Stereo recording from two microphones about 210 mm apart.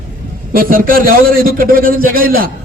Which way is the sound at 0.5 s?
45° right (ahead or behind).